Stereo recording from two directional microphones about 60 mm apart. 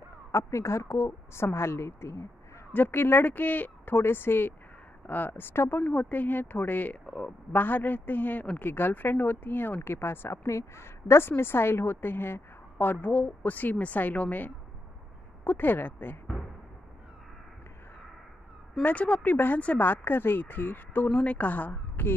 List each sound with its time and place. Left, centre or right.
0.3 s a woman's voice: left
2.7 s speech: left
18.8 s speech: left